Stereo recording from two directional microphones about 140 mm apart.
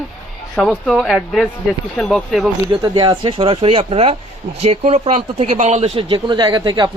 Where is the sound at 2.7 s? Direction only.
35° right (ahead or behind).